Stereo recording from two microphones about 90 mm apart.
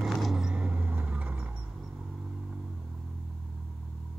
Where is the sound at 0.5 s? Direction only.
20° right (ahead or behind).